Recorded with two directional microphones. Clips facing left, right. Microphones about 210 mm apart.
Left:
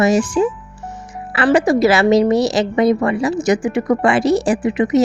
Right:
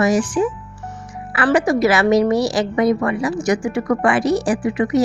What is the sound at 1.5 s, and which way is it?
A woman's voice, 30° left (ahead or behind).